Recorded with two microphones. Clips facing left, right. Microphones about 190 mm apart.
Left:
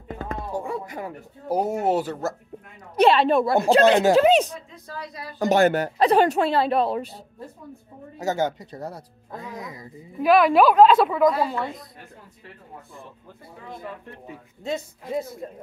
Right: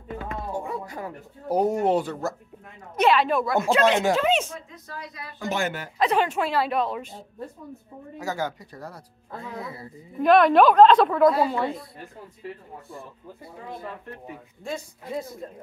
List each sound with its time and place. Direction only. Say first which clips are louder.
0.2 s a sound: left 3 dB; 40° left (ahead or behind)
1.5 s a woman's voice: right 1 dB; 5° left (ahead or behind)
3.0 s speech: left 3 dB; 30° left (ahead or behind)
8.2 s speech: left 5 dB; 25° left (ahead or behind)
10.2 s a woman's voice: even; 5° left (ahead or behind)